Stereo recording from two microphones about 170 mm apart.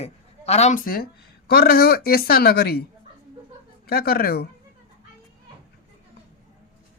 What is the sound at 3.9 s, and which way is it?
Speech, 65° left (ahead or behind).